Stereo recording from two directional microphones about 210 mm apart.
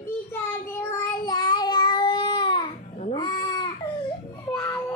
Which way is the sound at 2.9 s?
30° left (ahead or behind).